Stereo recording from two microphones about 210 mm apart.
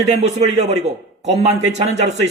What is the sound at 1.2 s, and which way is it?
Speech, 30° right (ahead or behind).